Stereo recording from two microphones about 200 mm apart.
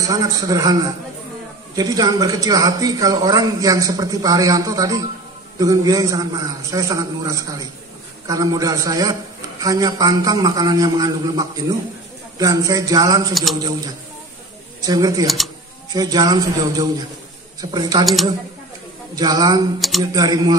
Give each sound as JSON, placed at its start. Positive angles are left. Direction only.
{"t": 0.0, "sound": "a man's voice", "side_deg": -15}
{"t": 13.3, "sound": "speech", "side_deg": 0}
{"t": 14.8, "sound": "a man's voice", "side_deg": -20}
{"t": 15.2, "sound": "speech", "side_deg": 0}
{"t": 15.9, "sound": "a man's voice", "side_deg": -20}
{"t": 18.0, "sound": "speech", "side_deg": 0}
{"t": 19.1, "sound": "a man's voice", "side_deg": -20}